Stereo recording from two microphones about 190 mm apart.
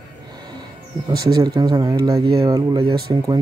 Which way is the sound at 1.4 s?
20° right (ahead or behind).